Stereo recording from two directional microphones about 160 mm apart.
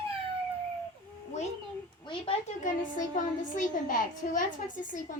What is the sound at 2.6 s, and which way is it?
A woman's voice, 55° left (ahead or behind).